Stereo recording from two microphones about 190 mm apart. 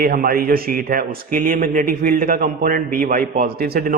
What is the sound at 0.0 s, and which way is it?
A man's voice, 50° right (ahead or behind).